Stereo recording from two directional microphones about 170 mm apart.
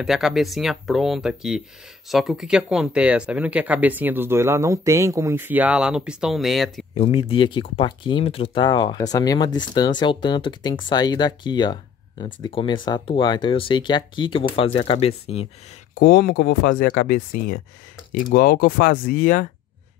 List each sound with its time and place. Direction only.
0.0 s speech: centre (ahead or behind)
7.0 s speech: 30° left (ahead or behind)
15.9 s speech: 65° left (ahead or behind)